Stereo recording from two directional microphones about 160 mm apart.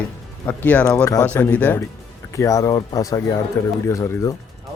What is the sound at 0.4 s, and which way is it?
Speech, 10° left (ahead or behind).